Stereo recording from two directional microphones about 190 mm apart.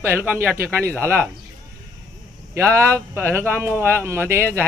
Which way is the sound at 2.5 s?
15° right (ahead or behind).